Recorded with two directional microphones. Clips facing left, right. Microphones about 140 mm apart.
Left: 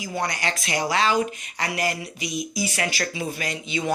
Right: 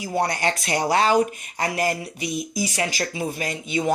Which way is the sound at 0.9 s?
50° right (ahead or behind).